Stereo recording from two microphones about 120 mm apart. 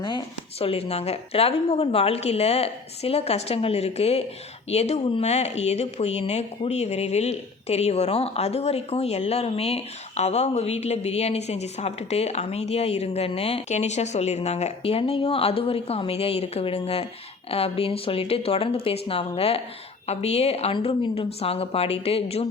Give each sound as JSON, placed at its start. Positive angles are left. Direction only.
{"t": 0.6, "sound": "speech", "side_deg": 55}
{"t": 20.7, "sound": "speech", "side_deg": 45}